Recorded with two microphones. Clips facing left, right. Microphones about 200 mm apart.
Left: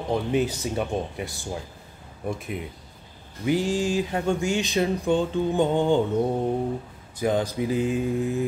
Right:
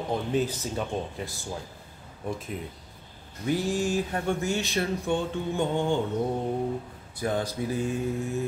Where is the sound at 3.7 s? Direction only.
90° left.